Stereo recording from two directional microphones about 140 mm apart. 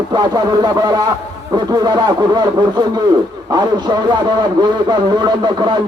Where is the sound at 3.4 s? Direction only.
30° right (ahead or behind).